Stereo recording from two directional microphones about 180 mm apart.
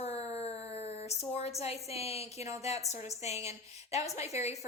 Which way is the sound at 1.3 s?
35° left (ahead or behind).